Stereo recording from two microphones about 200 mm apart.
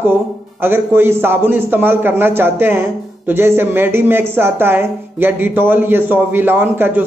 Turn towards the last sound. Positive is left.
turn(degrees=-10)  # may be behind; listen again after turning